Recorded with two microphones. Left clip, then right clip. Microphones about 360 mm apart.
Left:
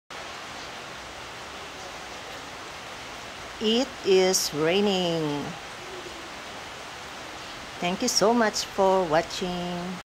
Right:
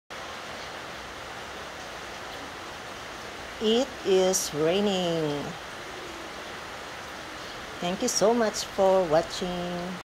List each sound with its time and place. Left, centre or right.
3.6 s speech: centre
7.8 s speech: centre
8.8 s speech: left